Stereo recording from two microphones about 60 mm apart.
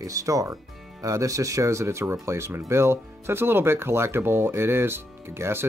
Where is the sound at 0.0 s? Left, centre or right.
Right.